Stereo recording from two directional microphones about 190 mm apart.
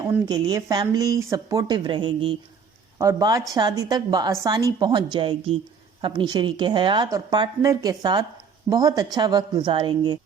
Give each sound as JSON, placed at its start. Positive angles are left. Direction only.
{"t": 0.0, "sound": "speech", "side_deg": -20}